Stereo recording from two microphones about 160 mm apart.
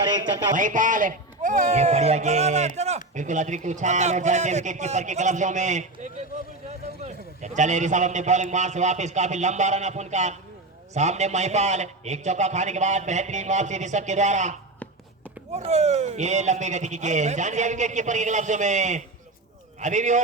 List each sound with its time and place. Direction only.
0.5 s a man's voice: 55° right (ahead or behind)
15.5 s a man's voice: 45° right (ahead or behind)